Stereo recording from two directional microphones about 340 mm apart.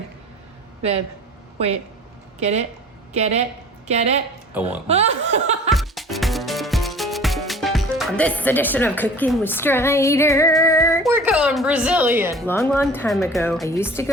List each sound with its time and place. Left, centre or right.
0.8 s speech: centre
2.4 s chuckle: centre
5.7 s music: centre
11.1 s speech: centre
12.5 s speech: centre